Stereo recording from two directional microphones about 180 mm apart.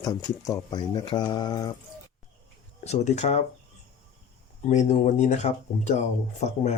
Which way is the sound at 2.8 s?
40° left (ahead or behind).